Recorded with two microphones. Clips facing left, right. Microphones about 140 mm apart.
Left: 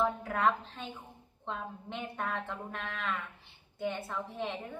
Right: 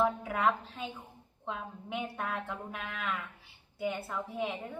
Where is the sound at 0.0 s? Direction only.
5° right (ahead or behind).